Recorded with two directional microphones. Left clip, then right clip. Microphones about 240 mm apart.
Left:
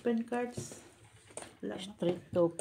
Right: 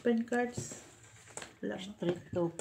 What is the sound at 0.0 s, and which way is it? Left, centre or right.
Speech, centre.